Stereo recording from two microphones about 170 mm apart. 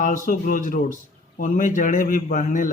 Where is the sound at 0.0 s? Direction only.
50° left (ahead or behind).